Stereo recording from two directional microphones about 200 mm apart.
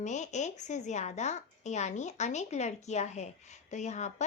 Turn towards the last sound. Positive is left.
turn(degrees=35)  # may be behind; listen again after turning